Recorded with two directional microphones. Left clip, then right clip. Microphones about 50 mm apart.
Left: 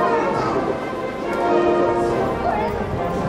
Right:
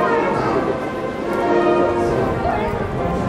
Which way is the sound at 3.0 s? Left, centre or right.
Centre.